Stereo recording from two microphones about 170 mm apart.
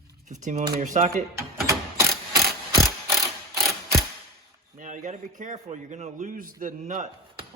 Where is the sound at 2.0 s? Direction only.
15° right (ahead or behind).